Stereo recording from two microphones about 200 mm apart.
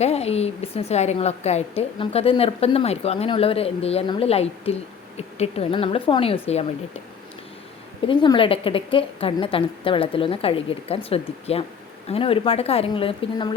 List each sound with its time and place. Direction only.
0.0 s a woman's voice: 30° left (ahead or behind)
8.0 s a woman's voice: 25° left (ahead or behind)